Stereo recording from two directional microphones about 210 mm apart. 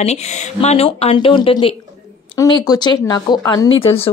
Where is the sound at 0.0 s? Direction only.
30° left (ahead or behind).